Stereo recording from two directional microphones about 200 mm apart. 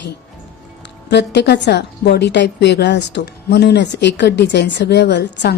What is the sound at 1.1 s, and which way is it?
A woman's voice, 60° left (ahead or behind).